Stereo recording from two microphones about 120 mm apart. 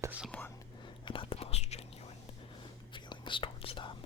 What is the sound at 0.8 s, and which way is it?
Whispering, 45° left (ahead or behind).